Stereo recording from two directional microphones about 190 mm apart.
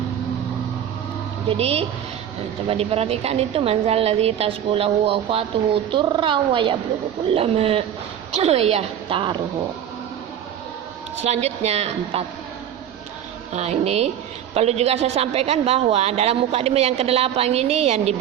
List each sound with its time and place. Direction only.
1.5 s a woman's voice: 30° right (ahead or behind)
11.2 s a woman's voice: 35° right (ahead or behind)
13.5 s a woman's voice: 35° right (ahead or behind)